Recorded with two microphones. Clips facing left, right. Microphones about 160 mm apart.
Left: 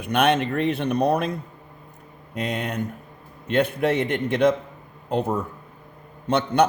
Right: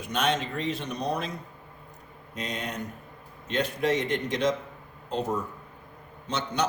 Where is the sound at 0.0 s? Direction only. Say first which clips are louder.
Left 7 dB; 60° left (ahead or behind).